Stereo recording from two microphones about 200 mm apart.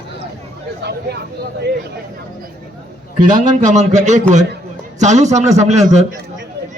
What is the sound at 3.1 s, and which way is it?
A man's voice, 40° right (ahead or behind).